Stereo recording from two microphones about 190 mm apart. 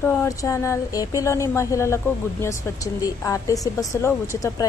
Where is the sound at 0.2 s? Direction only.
15° left (ahead or behind).